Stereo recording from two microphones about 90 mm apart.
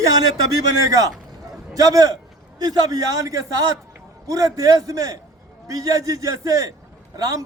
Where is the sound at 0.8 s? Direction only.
45° right (ahead or behind).